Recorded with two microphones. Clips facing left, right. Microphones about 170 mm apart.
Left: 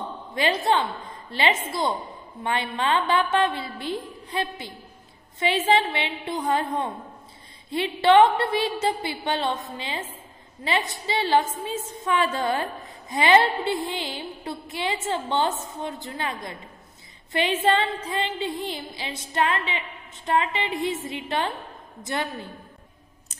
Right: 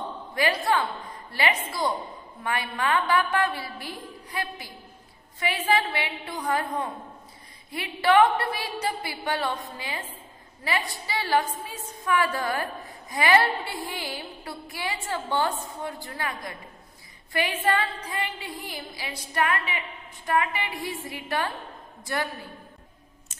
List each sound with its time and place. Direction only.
0.3 s a woman's voice: 25° left (ahead or behind)